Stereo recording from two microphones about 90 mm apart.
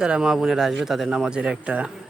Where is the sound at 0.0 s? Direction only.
5° right (ahead or behind).